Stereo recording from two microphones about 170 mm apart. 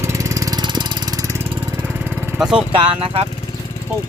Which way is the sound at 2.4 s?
5° right (ahead or behind).